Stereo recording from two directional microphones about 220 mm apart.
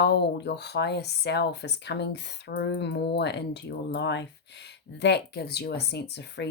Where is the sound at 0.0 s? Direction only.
50° left (ahead or behind).